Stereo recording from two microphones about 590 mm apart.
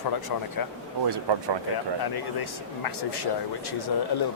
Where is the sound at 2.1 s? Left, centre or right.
Left.